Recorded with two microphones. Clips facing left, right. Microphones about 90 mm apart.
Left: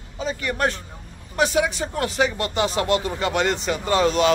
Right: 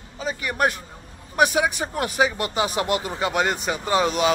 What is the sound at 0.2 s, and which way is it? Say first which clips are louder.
Speech: even; 5° right (ahead or behind).